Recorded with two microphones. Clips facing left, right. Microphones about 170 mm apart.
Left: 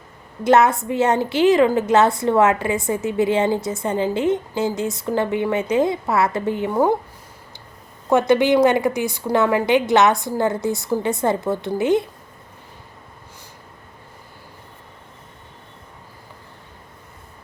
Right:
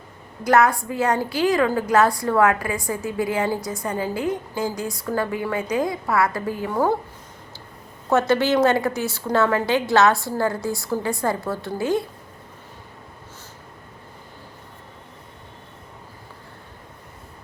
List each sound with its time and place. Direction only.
0.4 s a woman's voice: 25° left (ahead or behind)
8.3 s a woman's voice: 15° left (ahead or behind)